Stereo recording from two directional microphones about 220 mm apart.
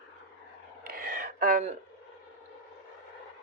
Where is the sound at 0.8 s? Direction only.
40° right (ahead or behind).